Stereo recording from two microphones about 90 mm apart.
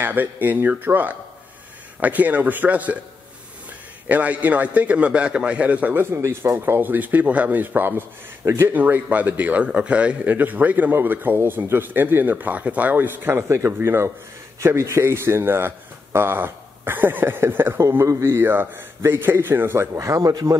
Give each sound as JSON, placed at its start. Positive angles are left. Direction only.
{"t": 0.0, "sound": "speech", "side_deg": -20}
{"t": 4.1, "sound": "a man's voice", "side_deg": -15}